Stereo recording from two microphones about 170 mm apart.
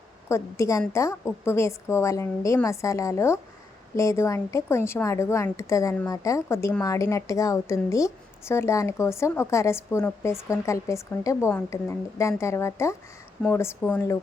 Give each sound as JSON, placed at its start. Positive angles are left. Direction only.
{"t": 0.3, "sound": "a woman's voice", "side_deg": 15}